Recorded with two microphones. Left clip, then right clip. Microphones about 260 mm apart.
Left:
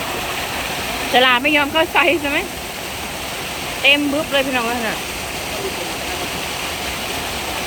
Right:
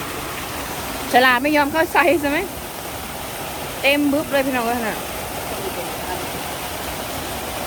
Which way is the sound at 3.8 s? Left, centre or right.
Centre.